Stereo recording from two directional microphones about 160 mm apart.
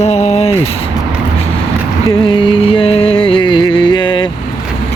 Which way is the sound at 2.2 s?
30° left (ahead or behind).